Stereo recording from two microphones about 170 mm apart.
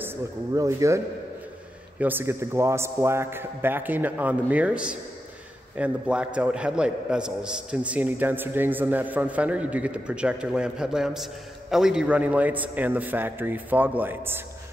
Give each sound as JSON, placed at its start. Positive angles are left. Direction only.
{"t": 0.0, "sound": "a man's voice", "side_deg": -15}